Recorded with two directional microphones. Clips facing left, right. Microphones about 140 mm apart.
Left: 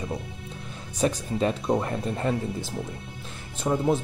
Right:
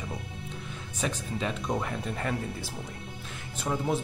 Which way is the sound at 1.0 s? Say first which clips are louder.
Left 7 dB; 40° left (ahead or behind).